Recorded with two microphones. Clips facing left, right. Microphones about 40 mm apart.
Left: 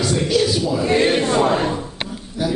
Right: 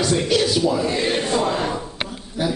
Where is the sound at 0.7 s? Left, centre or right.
Left.